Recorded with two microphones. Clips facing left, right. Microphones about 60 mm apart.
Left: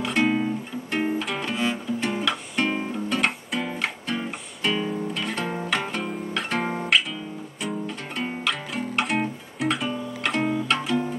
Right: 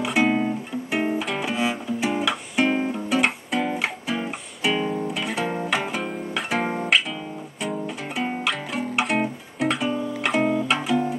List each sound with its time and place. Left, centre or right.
0.0 s guitar: centre
7.7 s music: centre